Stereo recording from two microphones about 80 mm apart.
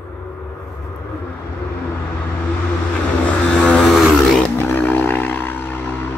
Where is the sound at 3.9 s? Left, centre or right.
Centre.